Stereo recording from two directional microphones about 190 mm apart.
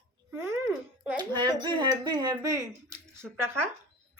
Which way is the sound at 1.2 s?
25° right (ahead or behind).